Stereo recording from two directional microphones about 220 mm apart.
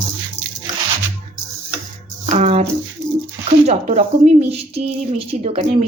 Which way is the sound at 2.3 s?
30° right (ahead or behind).